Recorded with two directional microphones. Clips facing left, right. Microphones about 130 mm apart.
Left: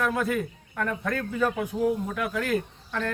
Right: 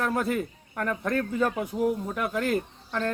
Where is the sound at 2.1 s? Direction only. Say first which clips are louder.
Even; 25° right (ahead or behind).